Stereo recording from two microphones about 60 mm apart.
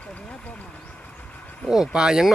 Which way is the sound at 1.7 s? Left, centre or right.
Centre.